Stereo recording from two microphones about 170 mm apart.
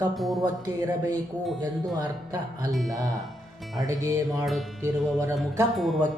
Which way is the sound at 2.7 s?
Centre (ahead or behind).